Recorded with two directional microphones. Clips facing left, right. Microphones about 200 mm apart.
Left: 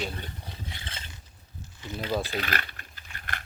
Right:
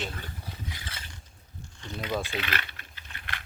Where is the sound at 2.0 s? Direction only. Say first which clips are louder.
Left 2 dB; 35° left (ahead or behind).